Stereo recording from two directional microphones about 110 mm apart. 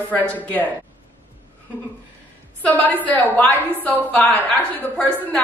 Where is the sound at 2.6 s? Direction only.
15° left (ahead or behind).